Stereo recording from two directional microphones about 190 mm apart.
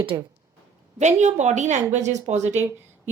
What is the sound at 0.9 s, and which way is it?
A woman's voice, 40° right (ahead or behind).